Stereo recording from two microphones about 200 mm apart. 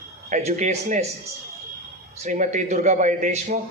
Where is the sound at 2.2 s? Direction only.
35° right (ahead or behind).